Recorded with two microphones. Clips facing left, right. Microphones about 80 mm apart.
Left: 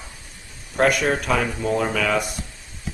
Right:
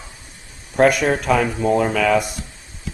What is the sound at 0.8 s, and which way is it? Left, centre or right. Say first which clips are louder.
A man's voice: right 4 dB; centre.